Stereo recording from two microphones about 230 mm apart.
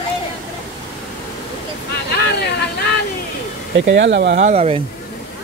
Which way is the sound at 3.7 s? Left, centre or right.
Right.